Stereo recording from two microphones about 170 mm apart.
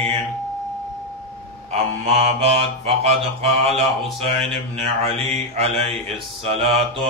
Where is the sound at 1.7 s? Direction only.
35° right (ahead or behind).